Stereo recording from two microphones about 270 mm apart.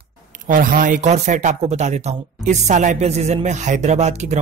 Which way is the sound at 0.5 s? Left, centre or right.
Right.